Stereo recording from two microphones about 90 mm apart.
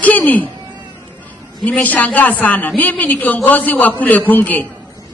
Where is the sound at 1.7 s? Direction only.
15° left (ahead or behind).